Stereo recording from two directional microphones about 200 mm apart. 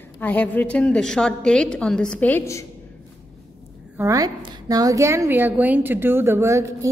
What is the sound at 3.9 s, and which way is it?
A woman's voice, 15° right (ahead or behind).